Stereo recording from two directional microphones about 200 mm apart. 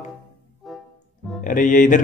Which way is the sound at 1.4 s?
40° left (ahead or behind).